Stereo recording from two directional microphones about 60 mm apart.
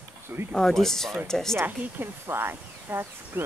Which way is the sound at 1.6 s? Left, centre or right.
Right.